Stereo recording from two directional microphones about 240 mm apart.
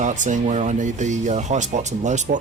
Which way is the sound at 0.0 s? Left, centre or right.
Right.